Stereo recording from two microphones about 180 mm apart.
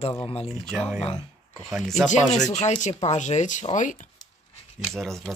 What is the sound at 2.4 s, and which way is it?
Speech, 40° left (ahead or behind).